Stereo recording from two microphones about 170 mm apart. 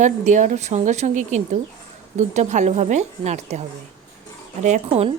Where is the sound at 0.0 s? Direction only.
45° right (ahead or behind).